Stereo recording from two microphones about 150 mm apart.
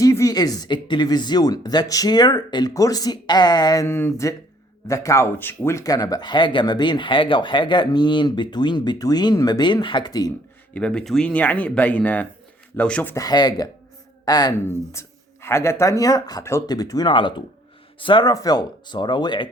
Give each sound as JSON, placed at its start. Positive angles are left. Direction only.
{"t": 0.0, "sound": "speech", "side_deg": 20}
{"t": 3.8, "sound": "speech", "side_deg": 15}
{"t": 10.8, "sound": "speech", "side_deg": 5}
{"t": 13.1, "sound": "speech", "side_deg": 25}